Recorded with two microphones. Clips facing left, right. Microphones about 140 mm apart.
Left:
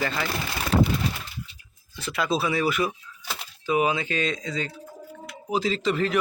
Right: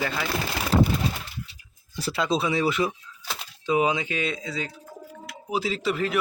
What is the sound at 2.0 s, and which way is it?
Speech, 35° right (ahead or behind).